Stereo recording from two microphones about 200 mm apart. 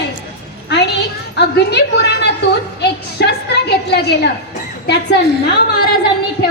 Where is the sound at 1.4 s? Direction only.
55° left (ahead or behind).